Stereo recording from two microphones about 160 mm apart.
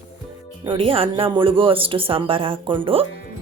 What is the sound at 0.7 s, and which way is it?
Speech, 35° right (ahead or behind).